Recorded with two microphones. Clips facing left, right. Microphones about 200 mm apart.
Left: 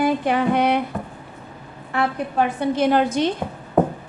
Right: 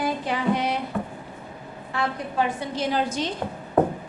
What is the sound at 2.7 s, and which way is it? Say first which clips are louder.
Speech: left 8 dB; 60° left (ahead or behind).